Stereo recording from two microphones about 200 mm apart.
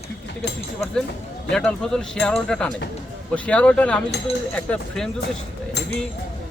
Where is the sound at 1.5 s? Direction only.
5° left (ahead or behind).